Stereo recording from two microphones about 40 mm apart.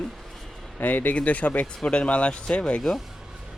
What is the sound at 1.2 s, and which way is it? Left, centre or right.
Speech, left.